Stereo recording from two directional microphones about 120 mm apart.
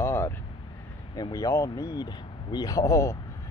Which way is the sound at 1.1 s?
30° left (ahead or behind).